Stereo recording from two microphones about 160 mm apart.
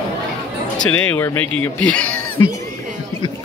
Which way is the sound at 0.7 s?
10° left (ahead or behind).